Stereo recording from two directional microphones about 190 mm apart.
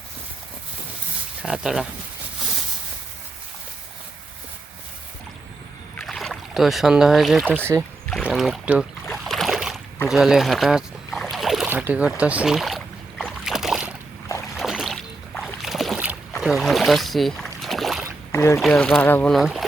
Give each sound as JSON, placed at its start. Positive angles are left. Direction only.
{"t": 1.4, "sound": "speech", "side_deg": -5}
{"t": 6.0, "sound": "speech", "side_deg": 0}
{"t": 7.6, "sound": "speech", "side_deg": -10}
{"t": 8.1, "sound": "speech", "side_deg": 0}
{"t": 9.0, "sound": "boat", "side_deg": 0}
{"t": 18.3, "sound": "speech", "side_deg": 15}
{"t": 18.6, "sound": "speech", "side_deg": 5}